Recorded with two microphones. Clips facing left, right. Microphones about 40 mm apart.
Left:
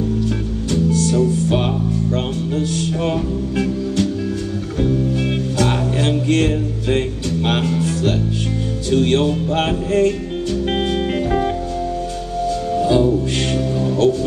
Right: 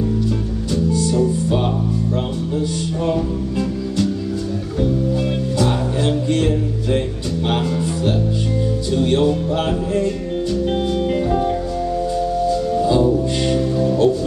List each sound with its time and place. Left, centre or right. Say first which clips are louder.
3.0 s music: right 4 dB; left
5.6 s music: left 1 dB; left
7.4 s music: left 1 dB; left
8.9 s music: left 1 dB; left
12.7 s music: left 2 dB; left